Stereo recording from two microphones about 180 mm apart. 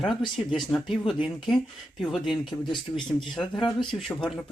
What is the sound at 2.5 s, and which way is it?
Speech, 25° left (ahead or behind).